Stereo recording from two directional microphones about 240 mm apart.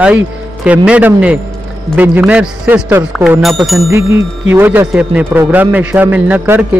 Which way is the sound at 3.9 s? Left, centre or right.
Centre.